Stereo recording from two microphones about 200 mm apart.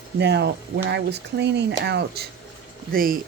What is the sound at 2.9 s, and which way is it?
Speech, 45° right (ahead or behind).